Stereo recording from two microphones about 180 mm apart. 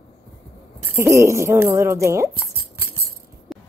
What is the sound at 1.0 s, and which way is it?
Speech, 15° right (ahead or behind).